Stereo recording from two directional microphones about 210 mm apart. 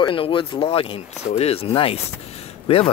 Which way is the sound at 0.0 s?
25° left (ahead or behind).